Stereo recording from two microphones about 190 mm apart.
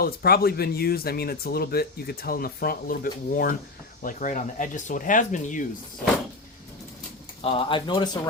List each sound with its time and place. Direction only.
0.0 s speech: 55° left (ahead or behind)
7.4 s speech: 30° left (ahead or behind)